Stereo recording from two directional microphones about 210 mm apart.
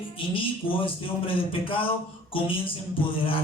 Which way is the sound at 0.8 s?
25° left (ahead or behind).